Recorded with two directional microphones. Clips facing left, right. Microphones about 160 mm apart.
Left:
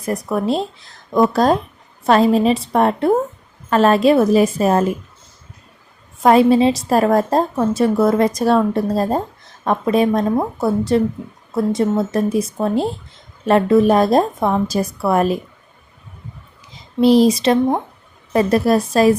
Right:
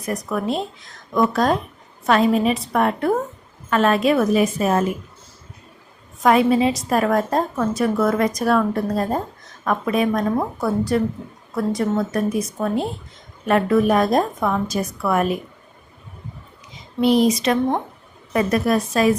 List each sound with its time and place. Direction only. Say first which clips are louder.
0.0 s a woman's voice: left 4 dB; 30° left (ahead or behind)
6.2 s a woman's voice: left 4 dB; 30° left (ahead or behind)
17.0 s speech: left 4 dB; 35° left (ahead or behind)